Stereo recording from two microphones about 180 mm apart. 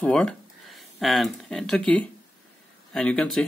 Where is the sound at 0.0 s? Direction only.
5° left (ahead or behind).